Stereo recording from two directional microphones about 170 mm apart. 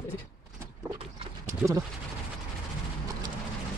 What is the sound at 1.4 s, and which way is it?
Clip-clop, 20° right (ahead or behind).